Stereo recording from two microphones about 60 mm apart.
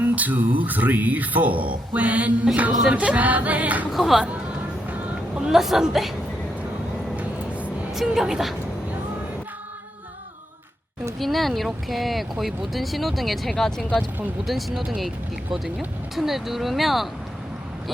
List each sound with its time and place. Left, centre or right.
0.0 s speech: right
3.9 s speech: centre
4.9 s music: right
5.4 s speech: centre
7.9 s speech: centre
11.2 s speech: centre
16.1 s speech: centre